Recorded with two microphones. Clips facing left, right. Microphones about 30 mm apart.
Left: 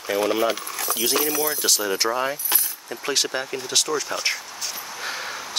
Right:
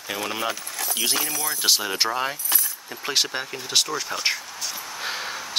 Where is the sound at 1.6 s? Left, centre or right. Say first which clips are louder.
Even; right.